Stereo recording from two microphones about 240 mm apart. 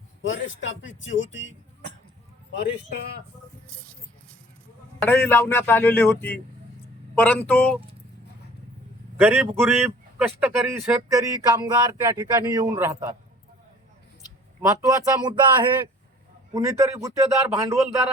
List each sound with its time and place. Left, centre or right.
0.2 s speech: left
2.6 s speech: left
4.9 s a man's voice: centre
9.1 s speech: centre
14.7 s speech: centre